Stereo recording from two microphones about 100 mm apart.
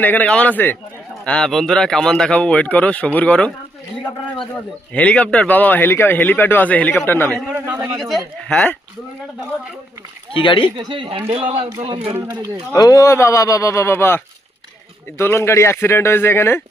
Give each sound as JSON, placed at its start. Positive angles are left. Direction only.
{"t": 0.0, "sound": "speech", "side_deg": 15}
{"t": 1.2, "sound": "speech", "side_deg": 10}
{"t": 4.9, "sound": "a man's voice", "side_deg": 15}
{"t": 7.5, "sound": "speech", "side_deg": -20}
{"t": 7.9, "sound": "speech", "side_deg": 0}
{"t": 10.3, "sound": "speech", "side_deg": 60}
{"t": 10.8, "sound": "speech", "side_deg": -55}
{"t": 11.3, "sound": "a man's voice", "side_deg": -70}
{"t": 12.7, "sound": "a man's voice", "side_deg": 35}
{"t": 15.2, "sound": "a man's voice", "side_deg": 25}